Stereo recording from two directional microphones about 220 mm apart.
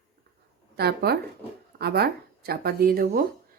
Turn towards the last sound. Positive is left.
turn(degrees=-45)  # may be behind; listen again after turning